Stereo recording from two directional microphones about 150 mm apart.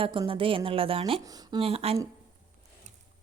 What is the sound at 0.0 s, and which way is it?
A woman's voice, 35° right (ahead or behind).